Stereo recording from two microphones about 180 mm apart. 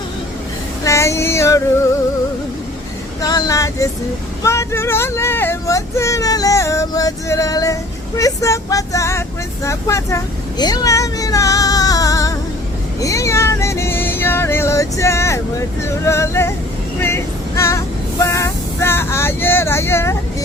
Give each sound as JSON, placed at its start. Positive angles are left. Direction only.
{"t": 0.9, "sound": "female singing", "side_deg": 15}
{"t": 3.2, "sound": "speech", "side_deg": 20}
{"t": 4.4, "sound": "a sound", "side_deg": 15}
{"t": 9.6, "sound": "speech", "side_deg": 15}
{"t": 13.0, "sound": "music", "side_deg": 20}
{"t": 16.0, "sound": "a sound", "side_deg": 15}
{"t": 17.0, "sound": "female singing", "side_deg": 15}